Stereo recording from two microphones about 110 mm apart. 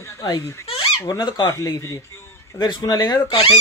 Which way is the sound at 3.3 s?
55° left (ahead or behind).